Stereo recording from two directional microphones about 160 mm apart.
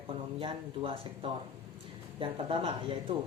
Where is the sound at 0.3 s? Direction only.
35° right (ahead or behind).